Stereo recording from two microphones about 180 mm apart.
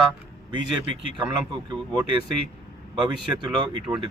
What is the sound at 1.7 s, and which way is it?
Speech, 25° right (ahead or behind).